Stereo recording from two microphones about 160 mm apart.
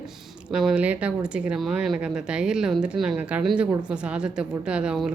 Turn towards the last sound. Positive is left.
turn(degrees=-5)  # may be behind; listen again after turning